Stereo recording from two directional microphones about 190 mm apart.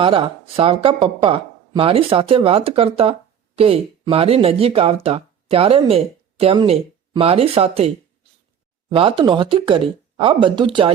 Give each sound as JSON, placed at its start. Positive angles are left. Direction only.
{"t": 0.0, "sound": "speech", "side_deg": -30}